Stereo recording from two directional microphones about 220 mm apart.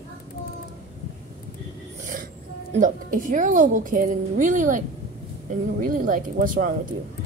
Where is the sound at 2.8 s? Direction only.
35° right (ahead or behind).